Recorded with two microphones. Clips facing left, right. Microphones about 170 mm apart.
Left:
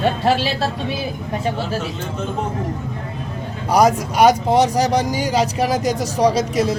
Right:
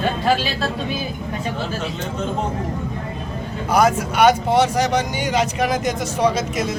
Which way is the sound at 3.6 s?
35° left (ahead or behind).